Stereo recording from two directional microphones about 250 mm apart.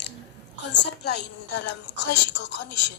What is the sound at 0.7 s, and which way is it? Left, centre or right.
A woman's voice, left.